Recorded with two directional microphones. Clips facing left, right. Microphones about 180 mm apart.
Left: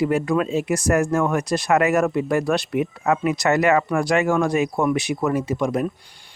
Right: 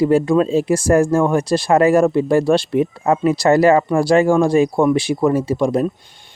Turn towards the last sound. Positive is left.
turn(degrees=-30)  # may be behind; listen again after turning